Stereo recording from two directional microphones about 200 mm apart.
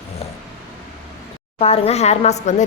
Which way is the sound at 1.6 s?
30° left (ahead or behind).